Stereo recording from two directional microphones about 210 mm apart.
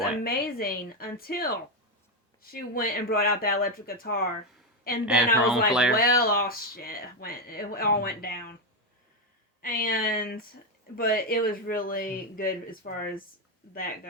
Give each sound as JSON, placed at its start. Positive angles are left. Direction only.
{"t": 0.0, "sound": "speech", "side_deg": 45}
{"t": 5.0, "sound": "a woman's voice", "side_deg": -5}
{"t": 5.9, "sound": "speech", "side_deg": 45}
{"t": 9.6, "sound": "speech", "side_deg": 40}